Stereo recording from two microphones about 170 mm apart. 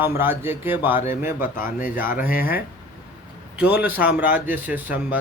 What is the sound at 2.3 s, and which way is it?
Speech, 60° left (ahead or behind).